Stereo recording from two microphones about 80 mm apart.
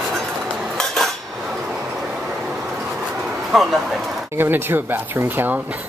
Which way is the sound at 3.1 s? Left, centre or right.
Centre.